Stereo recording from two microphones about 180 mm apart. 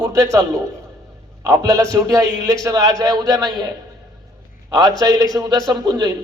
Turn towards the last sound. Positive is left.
turn(degrees=-25)  # may be behind; listen again after turning